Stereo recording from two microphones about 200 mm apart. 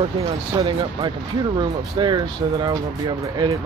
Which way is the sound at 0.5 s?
30° right (ahead or behind).